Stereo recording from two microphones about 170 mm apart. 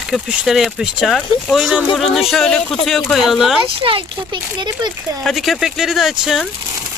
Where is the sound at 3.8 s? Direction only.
30° right (ahead or behind).